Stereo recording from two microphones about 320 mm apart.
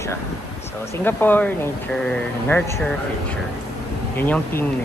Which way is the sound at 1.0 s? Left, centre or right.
Centre.